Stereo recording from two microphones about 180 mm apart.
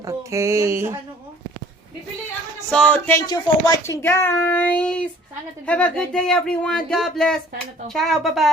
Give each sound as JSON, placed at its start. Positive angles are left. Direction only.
{"t": 0.0, "sound": "speech", "side_deg": -15}
{"t": 2.6, "sound": "a child's voice", "side_deg": 5}
{"t": 3.2, "sound": "a child's voice", "side_deg": 20}